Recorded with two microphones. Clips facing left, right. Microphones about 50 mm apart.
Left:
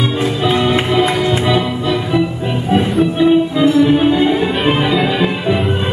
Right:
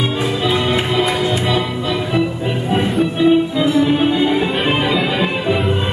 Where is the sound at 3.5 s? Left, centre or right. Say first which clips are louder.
Left 3 dB; centre.